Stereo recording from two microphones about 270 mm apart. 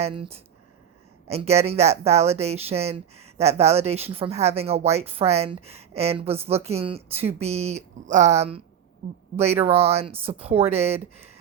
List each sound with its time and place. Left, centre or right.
0.0 s speech: right